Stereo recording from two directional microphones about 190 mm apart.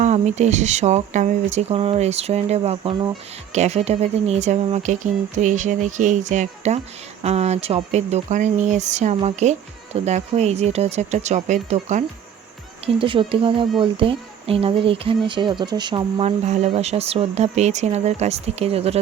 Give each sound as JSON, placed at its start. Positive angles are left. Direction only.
{"t": 0.0, "sound": "speech", "side_deg": -40}
{"t": 12.8, "sound": "speech", "side_deg": -25}